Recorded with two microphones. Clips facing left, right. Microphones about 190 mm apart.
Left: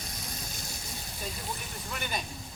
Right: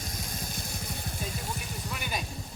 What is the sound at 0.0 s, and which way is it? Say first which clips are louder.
Music: right 3 dB; 50° right (ahead or behind).